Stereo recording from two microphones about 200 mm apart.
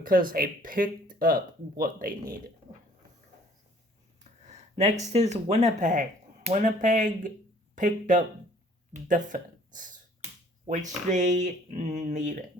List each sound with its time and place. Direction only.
0.0 s speech: 45° right (ahead or behind)
4.2 s a sound: 35° right (ahead or behind)
5.1 s speech: 35° right (ahead or behind)